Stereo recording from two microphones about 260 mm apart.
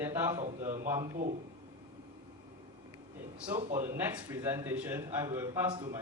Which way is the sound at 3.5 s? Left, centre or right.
Right.